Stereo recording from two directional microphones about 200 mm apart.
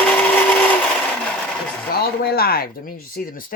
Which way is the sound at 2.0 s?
50° left (ahead or behind).